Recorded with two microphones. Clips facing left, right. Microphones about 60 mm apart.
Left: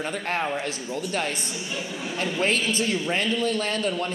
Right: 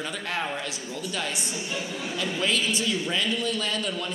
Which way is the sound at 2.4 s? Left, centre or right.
Left.